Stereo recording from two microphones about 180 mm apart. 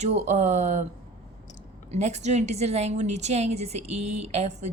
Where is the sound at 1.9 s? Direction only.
40° right (ahead or behind).